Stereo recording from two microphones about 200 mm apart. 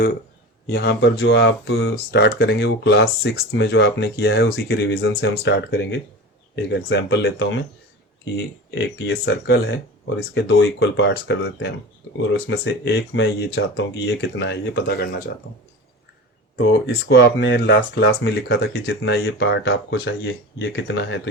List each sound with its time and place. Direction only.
0.7 s speech: 60° left (ahead or behind)
8.7 s speech: 60° left (ahead or behind)
16.8 s speech: 55° left (ahead or behind)